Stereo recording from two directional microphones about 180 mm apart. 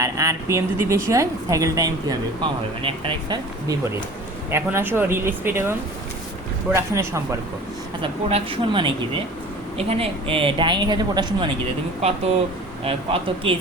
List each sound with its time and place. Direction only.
0.0 s speech: 15° right (ahead or behind)
4.5 s speech: 10° right (ahead or behind)
6.7 s speech: 15° right (ahead or behind)
8.0 s speech: 30° right (ahead or behind)
12.8 s speech: 30° right (ahead or behind)